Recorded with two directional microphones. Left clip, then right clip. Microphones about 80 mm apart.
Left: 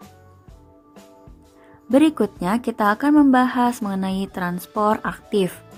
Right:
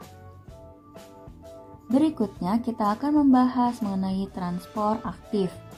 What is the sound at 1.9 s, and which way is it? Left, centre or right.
A woman's voice, left.